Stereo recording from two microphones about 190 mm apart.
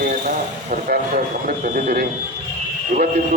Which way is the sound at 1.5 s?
50° right (ahead or behind).